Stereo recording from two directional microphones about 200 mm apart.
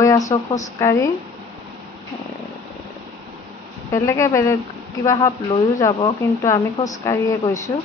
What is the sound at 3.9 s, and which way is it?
Speech, 15° left (ahead or behind).